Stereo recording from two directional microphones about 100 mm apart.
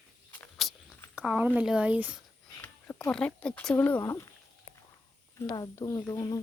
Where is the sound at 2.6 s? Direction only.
25° left (ahead or behind).